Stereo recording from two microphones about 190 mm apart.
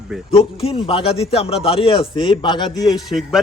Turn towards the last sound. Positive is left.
turn(degrees=0)  # may be behind; listen again after turning